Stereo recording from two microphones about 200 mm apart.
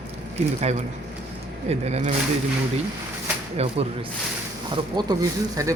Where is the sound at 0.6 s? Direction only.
35° right (ahead or behind).